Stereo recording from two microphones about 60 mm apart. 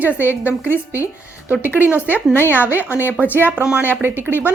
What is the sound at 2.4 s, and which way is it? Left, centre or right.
Speech, left.